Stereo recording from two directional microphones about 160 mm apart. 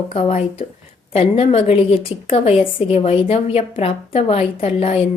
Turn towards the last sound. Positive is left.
turn(degrees=40)  # may be behind; listen again after turning